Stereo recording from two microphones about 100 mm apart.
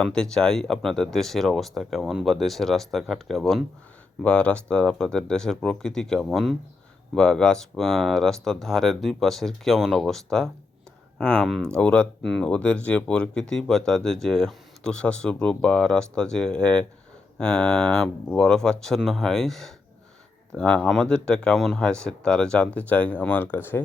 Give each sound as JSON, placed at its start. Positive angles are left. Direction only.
{"t": 0.0, "sound": "speech", "side_deg": 5}
{"t": 4.2, "sound": "speech", "side_deg": 10}